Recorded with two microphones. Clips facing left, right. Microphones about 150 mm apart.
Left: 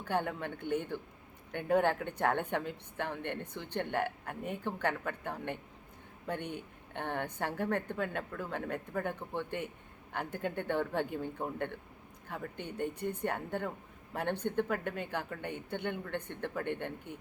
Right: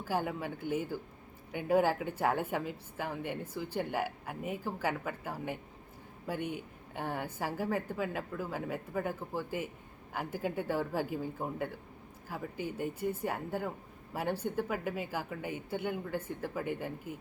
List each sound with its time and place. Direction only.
0.0 s speech: 5° right (ahead or behind)